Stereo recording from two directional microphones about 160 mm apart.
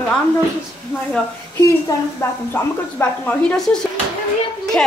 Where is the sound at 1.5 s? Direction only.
20° left (ahead or behind).